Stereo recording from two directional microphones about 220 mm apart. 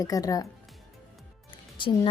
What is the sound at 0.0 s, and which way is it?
Speech, 15° left (ahead or behind).